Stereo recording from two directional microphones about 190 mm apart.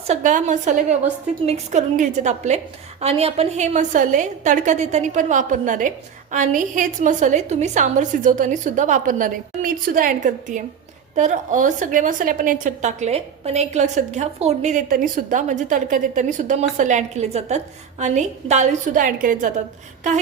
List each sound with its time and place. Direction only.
0.1 s a woman's voice: 40° right (ahead or behind)